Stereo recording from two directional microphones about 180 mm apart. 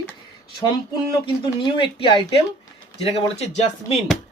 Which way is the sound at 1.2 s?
30° left (ahead or behind).